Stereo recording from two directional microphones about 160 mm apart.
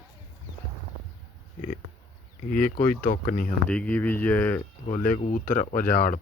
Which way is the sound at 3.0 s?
60° left (ahead or behind).